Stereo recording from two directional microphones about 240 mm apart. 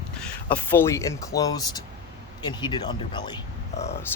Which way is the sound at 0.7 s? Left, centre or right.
Centre.